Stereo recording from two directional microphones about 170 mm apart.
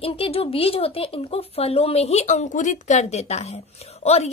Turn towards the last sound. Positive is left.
turn(degrees=40)  # may be behind; listen again after turning